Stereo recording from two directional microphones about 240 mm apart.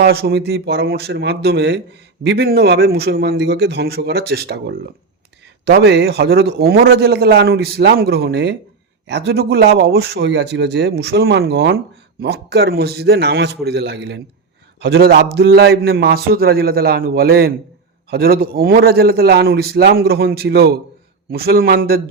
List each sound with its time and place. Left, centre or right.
0.0 s a man's voice: right